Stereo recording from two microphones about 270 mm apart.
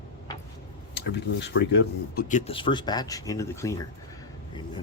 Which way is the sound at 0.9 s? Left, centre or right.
Left.